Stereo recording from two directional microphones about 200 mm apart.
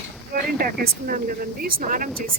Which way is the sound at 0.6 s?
45° right (ahead or behind).